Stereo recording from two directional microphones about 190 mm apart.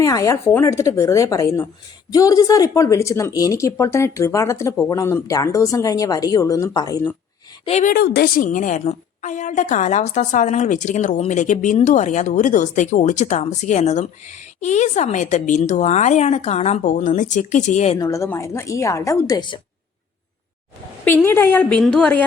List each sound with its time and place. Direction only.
0.0 s speech: 15° left (ahead or behind)
7.6 s a woman's voice: 35° left (ahead or behind)
7.9 s a woman's voice: 55° left (ahead or behind); by 17.9 s 35° left (ahead or behind)
17.9 s speech: 20° left (ahead or behind)
21.2 s speech: 10° left (ahead or behind)